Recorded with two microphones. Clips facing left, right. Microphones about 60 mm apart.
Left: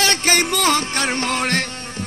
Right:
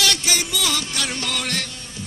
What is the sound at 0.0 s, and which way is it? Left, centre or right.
Music, left.